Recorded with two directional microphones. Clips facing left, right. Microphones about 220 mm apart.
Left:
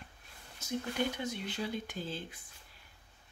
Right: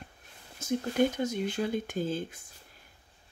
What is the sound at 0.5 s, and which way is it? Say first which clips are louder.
Speech: right 8 dB; 50° right (ahead or behind).